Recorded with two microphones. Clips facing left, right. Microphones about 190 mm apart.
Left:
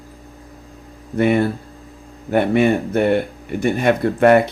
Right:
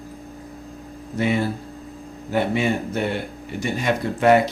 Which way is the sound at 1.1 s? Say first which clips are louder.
Left 6 dB; 55° left (ahead or behind).